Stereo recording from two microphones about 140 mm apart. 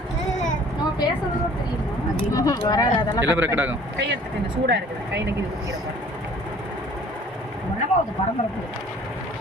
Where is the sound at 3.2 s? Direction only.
15° right (ahead or behind).